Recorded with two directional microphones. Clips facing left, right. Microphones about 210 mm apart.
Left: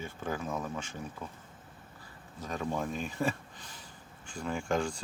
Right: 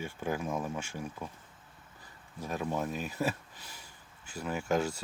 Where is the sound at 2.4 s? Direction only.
10° right (ahead or behind).